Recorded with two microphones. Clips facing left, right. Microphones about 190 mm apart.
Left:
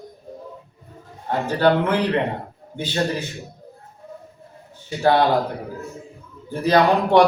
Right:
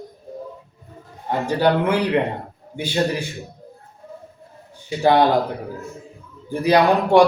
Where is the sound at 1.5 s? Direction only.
15° right (ahead or behind).